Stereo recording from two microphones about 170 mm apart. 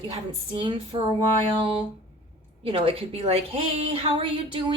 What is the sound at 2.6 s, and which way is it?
A woman's voice, 35° right (ahead or behind).